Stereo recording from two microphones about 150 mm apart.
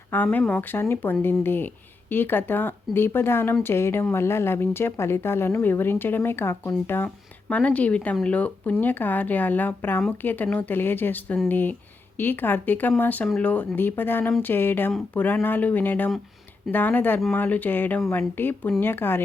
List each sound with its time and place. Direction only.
0.1 s a woman's voice: 10° left (ahead or behind)